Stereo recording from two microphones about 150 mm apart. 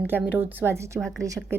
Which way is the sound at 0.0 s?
10° right (ahead or behind).